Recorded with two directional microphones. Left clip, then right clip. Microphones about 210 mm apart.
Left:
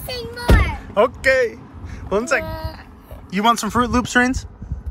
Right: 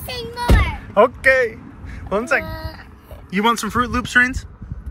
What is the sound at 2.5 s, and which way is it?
Speech, 20° left (ahead or behind).